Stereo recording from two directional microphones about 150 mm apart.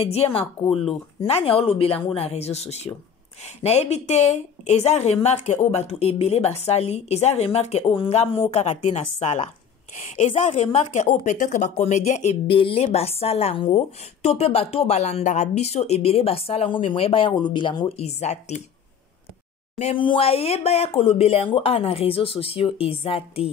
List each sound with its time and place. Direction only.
0.0 s a woman's voice: 40° left (ahead or behind)
19.8 s a woman's voice: 35° left (ahead or behind)